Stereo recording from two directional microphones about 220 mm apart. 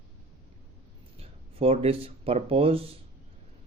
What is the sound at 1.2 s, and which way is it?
Speech, 25° right (ahead or behind).